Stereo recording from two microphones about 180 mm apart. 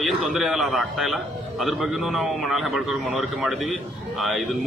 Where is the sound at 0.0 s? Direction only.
Centre (ahead or behind).